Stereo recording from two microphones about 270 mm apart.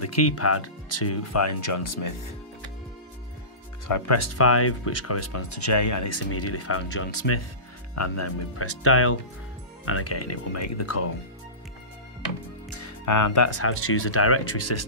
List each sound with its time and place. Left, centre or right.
0.0 s speech: left
3.9 s speech: left
7.9 s speech: left
12.7 s speech: left